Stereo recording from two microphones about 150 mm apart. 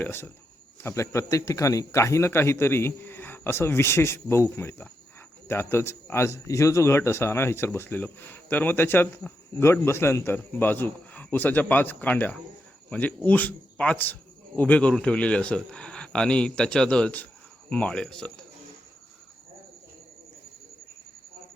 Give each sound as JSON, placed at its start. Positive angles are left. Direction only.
{"t": 0.0, "sound": "speech", "side_deg": 15}